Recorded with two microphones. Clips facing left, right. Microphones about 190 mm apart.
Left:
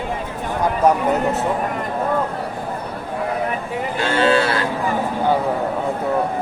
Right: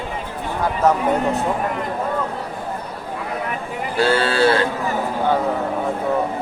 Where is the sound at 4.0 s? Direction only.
35° right (ahead or behind).